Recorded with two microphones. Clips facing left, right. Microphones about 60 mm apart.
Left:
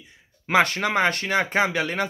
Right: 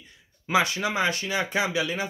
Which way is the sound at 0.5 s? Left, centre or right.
Left.